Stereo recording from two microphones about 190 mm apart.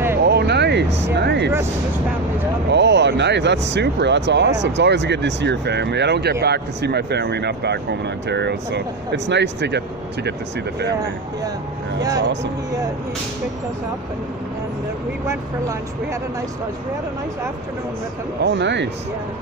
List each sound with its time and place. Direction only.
0.2 s a sound: 60° right (ahead or behind)
1.0 s speech: 65° right (ahead or behind)
2.7 s speech: 65° right (ahead or behind)
12.0 s speech: 20° right (ahead or behind)
18.4 s speech: 70° right (ahead or behind)